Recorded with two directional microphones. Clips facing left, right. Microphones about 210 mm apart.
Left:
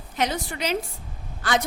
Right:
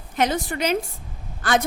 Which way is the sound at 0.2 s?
50° right (ahead or behind).